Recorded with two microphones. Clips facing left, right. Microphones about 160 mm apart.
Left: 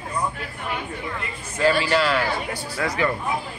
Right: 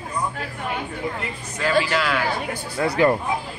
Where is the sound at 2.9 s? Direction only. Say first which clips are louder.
Right 7 dB; 55° right (ahead or behind).